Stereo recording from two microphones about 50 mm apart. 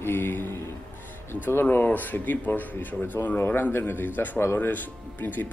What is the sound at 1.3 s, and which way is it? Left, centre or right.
Speech, left.